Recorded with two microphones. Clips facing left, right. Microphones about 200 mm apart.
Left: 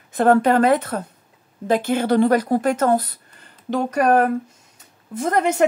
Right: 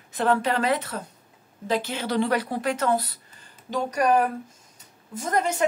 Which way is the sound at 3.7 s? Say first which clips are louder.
Left 4 dB; 60° left (ahead or behind).